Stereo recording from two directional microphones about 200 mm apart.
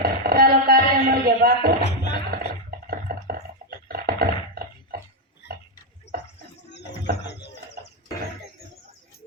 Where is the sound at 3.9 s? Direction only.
50° right (ahead or behind).